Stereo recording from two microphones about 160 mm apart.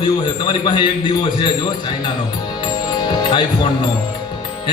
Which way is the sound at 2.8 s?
30° left (ahead or behind).